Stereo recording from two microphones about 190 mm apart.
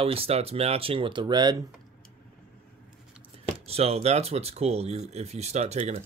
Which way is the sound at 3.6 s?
30° right (ahead or behind).